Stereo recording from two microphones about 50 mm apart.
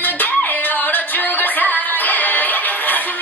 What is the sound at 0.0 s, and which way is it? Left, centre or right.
Music, left.